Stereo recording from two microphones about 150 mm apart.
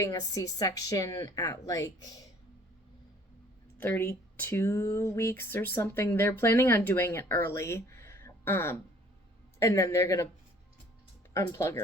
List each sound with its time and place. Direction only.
0.0 s speech: 25° left (ahead or behind)
3.8 s speech: 15° left (ahead or behind)
11.3 s speech: 20° left (ahead or behind)